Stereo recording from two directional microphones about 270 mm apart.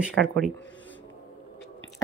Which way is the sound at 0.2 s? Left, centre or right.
Right.